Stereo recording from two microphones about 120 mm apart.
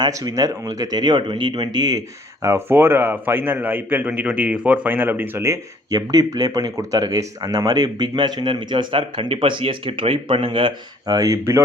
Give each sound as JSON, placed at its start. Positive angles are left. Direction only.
{"t": 0.0, "sound": "speech", "side_deg": -30}